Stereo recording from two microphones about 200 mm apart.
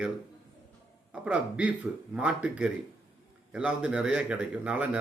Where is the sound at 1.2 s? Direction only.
5° right (ahead or behind).